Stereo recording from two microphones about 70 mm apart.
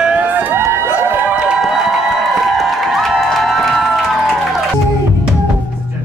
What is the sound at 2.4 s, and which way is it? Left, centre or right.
Music, centre.